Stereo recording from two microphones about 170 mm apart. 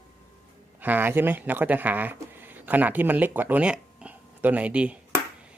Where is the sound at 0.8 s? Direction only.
10° right (ahead or behind).